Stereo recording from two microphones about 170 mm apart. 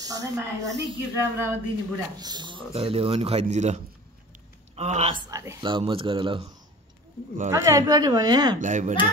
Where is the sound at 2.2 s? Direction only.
25° right (ahead or behind); by 3.7 s 40° right (ahead or behind).